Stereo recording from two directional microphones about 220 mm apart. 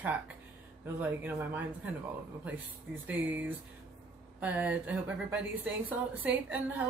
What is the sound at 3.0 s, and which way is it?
Speech, 5° right (ahead or behind).